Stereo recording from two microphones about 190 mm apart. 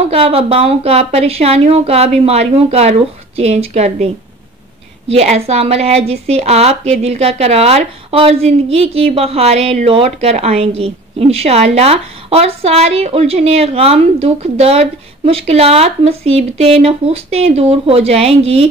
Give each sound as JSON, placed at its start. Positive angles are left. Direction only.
{"t": 0.1, "sound": "a woman's voice", "side_deg": -30}